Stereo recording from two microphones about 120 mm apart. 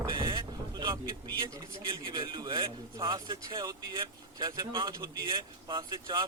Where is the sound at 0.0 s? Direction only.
40° right (ahead or behind).